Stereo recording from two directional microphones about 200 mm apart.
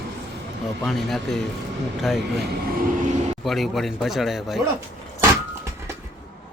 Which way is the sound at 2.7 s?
40° right (ahead or behind).